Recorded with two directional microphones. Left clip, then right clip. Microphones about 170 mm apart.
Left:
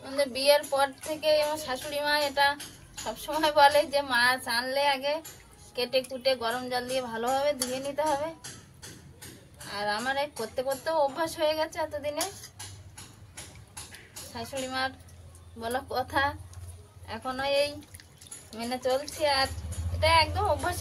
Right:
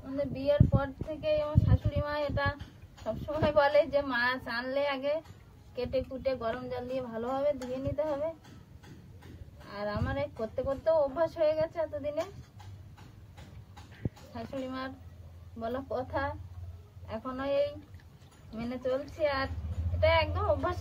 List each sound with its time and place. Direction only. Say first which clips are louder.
0.2 s child singing: left 6 dB; 20° left (ahead or behind)
3.3 s a woman's voice: left 4 dB; 20° left (ahead or behind)
9.7 s a woman's voice: left 6 dB; 20° left (ahead or behind)
14.3 s child singing: left 6 dB; 20° left (ahead or behind)
18.5 s a woman's voice: left 4 dB; 15° left (ahead or behind)